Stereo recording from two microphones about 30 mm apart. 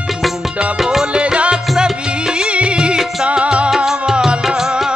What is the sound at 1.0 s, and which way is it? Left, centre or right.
Music, right.